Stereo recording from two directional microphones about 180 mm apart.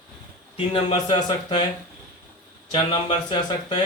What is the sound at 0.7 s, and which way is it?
Speech, 30° left (ahead or behind).